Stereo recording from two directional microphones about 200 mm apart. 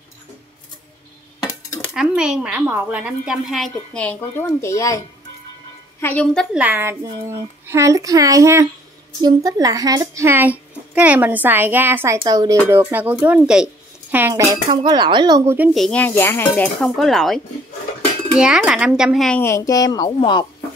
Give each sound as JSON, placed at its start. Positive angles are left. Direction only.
{"t": 1.4, "sound": "dishes", "side_deg": 15}
{"t": 2.0, "sound": "speech", "side_deg": -5}
{"t": 6.5, "sound": "a child's voice", "side_deg": -10}